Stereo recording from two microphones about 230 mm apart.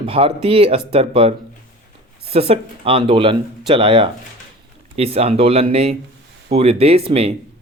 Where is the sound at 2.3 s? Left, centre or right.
Right.